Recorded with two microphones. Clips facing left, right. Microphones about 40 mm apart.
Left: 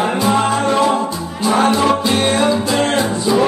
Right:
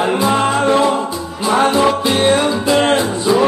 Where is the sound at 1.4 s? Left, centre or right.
Right.